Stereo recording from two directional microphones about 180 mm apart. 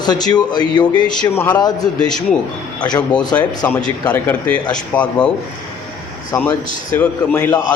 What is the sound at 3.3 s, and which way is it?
A man's voice, 10° left (ahead or behind).